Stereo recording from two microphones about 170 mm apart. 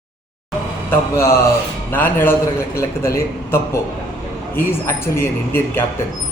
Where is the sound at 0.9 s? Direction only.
15° left (ahead or behind).